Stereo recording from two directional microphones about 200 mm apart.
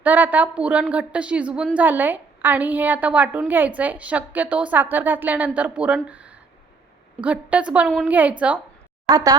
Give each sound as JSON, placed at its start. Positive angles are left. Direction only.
{"t": 0.0, "sound": "a woman's voice", "side_deg": -10}
{"t": 6.1, "sound": "a sound", "side_deg": -5}
{"t": 7.2, "sound": "a woman's voice", "side_deg": -5}
{"t": 9.0, "sound": "speech", "side_deg": -20}